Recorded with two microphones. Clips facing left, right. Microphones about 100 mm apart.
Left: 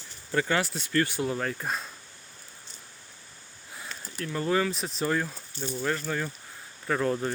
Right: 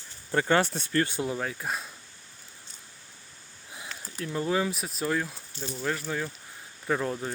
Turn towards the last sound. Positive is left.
turn(degrees=-5)  # may be behind; listen again after turning